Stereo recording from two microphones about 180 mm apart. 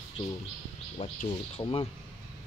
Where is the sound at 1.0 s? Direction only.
35° left (ahead or behind).